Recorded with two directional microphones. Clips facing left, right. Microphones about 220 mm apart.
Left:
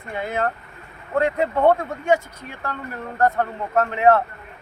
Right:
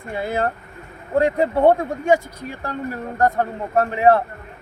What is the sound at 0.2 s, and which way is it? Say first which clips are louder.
Speech: right 2 dB; 30° right (ahead or behind).